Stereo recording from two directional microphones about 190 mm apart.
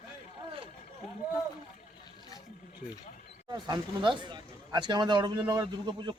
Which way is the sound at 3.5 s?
25° right (ahead or behind).